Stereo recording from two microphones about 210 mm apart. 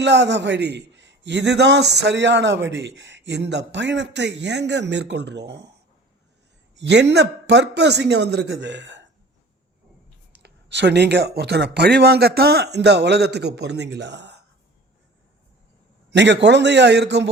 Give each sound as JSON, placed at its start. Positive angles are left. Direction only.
{"t": 0.0, "sound": "a man's voice", "side_deg": -55}
{"t": 6.7, "sound": "a man's voice", "side_deg": -55}
{"t": 10.4, "sound": "speech", "side_deg": -55}
{"t": 16.0, "sound": "a man's voice", "side_deg": -55}